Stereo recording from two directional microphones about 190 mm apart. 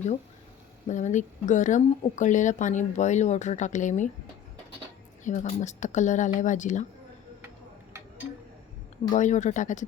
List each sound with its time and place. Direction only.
0.9 s speech: 40° left (ahead or behind)
5.2 s speech: 35° left (ahead or behind)
9.1 s speech: 40° left (ahead or behind)